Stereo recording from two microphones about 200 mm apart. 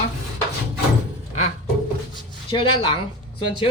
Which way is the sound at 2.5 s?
25° left (ahead or behind).